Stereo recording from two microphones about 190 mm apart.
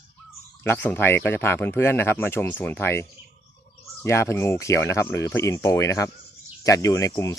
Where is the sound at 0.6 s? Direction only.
10° left (ahead or behind).